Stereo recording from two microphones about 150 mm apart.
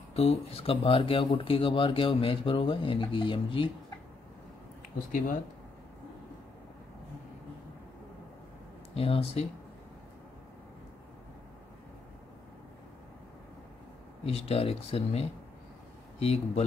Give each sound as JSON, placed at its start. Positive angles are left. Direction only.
{"t": 0.1, "sound": "speech", "side_deg": 40}
{"t": 8.9, "sound": "speech", "side_deg": 40}
{"t": 14.2, "sound": "speech", "side_deg": 40}